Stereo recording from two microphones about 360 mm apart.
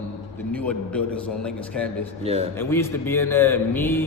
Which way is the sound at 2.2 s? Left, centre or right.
Centre.